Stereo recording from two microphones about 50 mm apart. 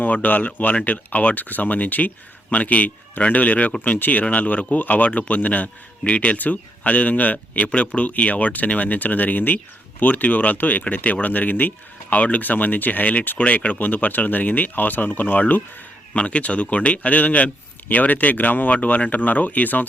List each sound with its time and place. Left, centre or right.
0.0 s speech: left
16.1 s speech: left